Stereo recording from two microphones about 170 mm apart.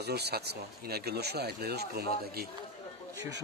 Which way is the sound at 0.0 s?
75° right (ahead or behind).